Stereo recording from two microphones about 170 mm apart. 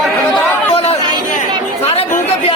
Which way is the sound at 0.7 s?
35° left (ahead or behind).